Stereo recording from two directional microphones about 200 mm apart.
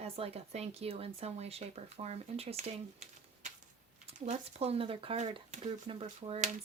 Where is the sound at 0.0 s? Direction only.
30° right (ahead or behind).